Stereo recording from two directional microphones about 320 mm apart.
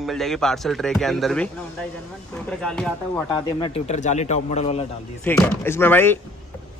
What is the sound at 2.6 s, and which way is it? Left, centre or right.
Speech, centre.